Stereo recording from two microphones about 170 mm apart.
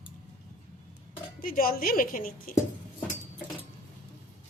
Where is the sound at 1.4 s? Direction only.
55° left (ahead or behind).